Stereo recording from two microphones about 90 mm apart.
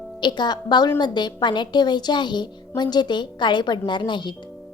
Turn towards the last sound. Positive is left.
turn(degrees=60)  # may be behind; listen again after turning